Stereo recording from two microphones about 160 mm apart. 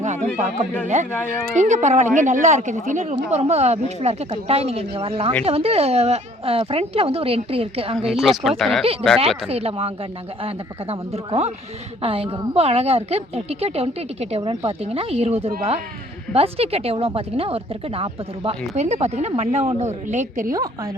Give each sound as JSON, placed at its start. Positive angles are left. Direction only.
{"t": 0.0, "sound": "chatter", "side_deg": -45}
{"t": 1.1, "sound": "speech", "side_deg": 15}
{"t": 1.5, "sound": "a woman's voice", "side_deg": -50}
{"t": 8.1, "sound": "speech", "side_deg": -5}
{"t": 8.8, "sound": "a woman's voice", "side_deg": -35}
{"t": 20.5, "sound": "a woman's voice", "side_deg": -20}